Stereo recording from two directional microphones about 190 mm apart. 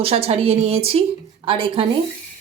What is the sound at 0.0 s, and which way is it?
A woman's voice, 30° right (ahead or behind).